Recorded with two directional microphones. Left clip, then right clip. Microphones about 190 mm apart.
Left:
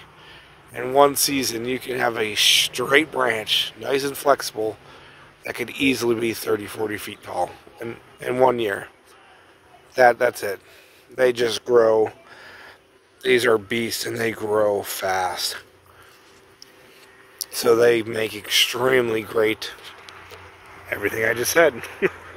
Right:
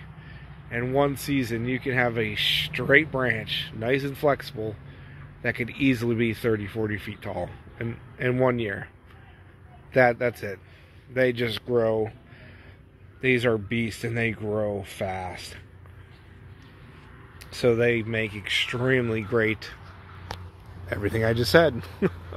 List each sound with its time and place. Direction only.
0.8 s speech: 25° left (ahead or behind)
9.9 s speech: 25° left (ahead or behind)
11.9 s a sound: 30° left (ahead or behind)
13.2 s speech: 30° left (ahead or behind)
17.5 s speech: 40° left (ahead or behind); by 19.7 s 20° left (ahead or behind)
20.9 s speech: 5° left (ahead or behind)